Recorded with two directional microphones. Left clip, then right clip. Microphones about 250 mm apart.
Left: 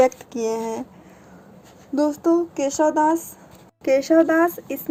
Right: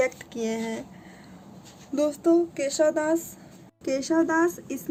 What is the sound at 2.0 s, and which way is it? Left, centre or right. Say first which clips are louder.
Speech: left 3 dB; centre.